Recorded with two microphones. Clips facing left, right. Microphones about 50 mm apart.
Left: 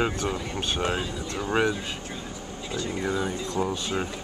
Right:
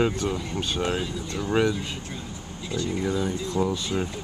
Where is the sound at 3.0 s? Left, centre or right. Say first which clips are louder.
Right 1 dB; left.